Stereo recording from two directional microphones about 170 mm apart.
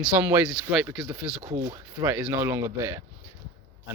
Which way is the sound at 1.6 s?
15° right (ahead or behind).